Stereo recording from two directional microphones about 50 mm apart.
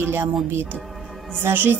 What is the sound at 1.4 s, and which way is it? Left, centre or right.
Speech, right.